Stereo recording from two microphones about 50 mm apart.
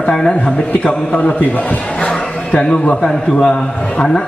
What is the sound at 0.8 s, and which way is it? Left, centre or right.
A man's voice, left.